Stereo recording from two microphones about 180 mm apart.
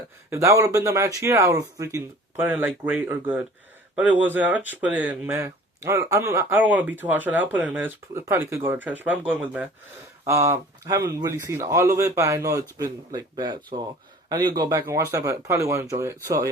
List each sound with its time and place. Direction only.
0.3 s a man's voice: 15° right (ahead or behind)